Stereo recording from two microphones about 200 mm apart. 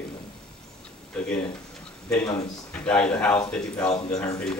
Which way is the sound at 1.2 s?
5° left (ahead or behind).